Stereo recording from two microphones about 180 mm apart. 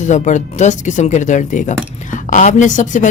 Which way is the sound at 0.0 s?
45° left (ahead or behind).